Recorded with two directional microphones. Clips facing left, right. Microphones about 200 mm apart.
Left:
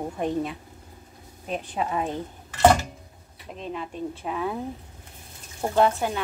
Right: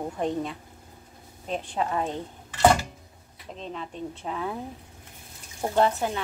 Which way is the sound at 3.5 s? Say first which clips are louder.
Left 3 dB; 5° left (ahead or behind).